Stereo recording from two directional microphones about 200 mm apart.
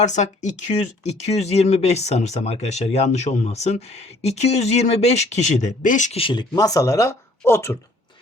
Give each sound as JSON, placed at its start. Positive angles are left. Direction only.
{"t": 0.0, "sound": "speech", "side_deg": 35}